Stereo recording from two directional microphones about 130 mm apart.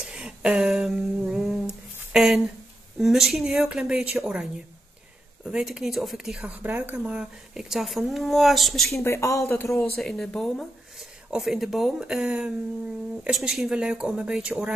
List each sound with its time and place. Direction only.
0.0 s humming: 5° right (ahead or behind)
2.1 s speech: 5° right (ahead or behind)
8.9 s speech: 20° left (ahead or behind)
9.9 s speech: 5° left (ahead or behind)